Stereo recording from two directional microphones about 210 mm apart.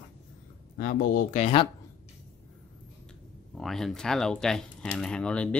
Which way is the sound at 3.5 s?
Centre (ahead or behind).